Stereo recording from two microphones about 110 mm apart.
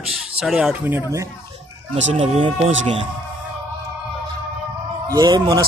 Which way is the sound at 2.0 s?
70° right (ahead or behind).